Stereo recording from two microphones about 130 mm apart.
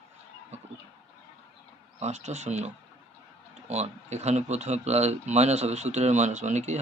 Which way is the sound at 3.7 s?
60° right (ahead or behind).